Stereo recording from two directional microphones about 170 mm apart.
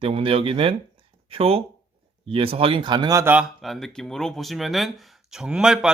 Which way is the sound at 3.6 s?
Centre (ahead or behind).